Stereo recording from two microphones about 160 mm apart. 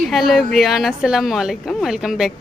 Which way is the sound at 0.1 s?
Centre (ahead or behind).